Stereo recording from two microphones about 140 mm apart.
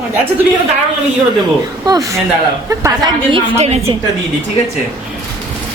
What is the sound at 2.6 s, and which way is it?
Speech, 20° right (ahead or behind).